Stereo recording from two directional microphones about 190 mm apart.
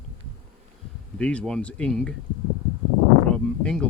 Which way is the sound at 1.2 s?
5° left (ahead or behind).